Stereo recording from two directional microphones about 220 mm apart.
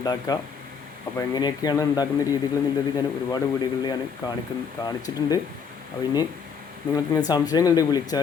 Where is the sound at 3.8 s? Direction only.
20° left (ahead or behind).